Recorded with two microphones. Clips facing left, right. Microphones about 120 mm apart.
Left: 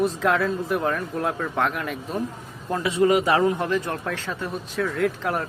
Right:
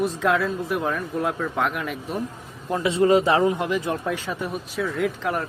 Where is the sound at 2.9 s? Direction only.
30° right (ahead or behind); by 5.5 s centre (ahead or behind).